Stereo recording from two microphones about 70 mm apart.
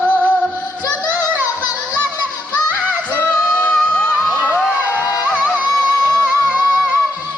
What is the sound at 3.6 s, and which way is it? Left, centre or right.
Music, centre.